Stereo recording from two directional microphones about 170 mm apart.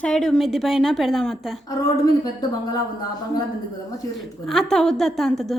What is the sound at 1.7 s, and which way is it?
Speech, 20° left (ahead or behind).